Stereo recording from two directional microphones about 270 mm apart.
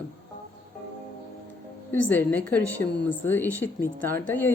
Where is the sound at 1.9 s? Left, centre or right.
Centre.